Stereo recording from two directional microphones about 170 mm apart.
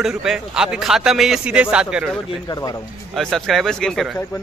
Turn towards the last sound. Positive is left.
turn(degrees=0)  # may be behind; listen again after turning